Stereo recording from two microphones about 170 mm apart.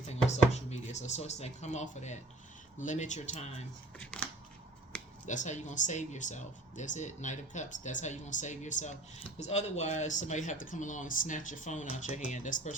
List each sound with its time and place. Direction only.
0.1 s speech: 40° left (ahead or behind)
3.9 s speech: 5° left (ahead or behind)
5.2 s speech: 45° left (ahead or behind)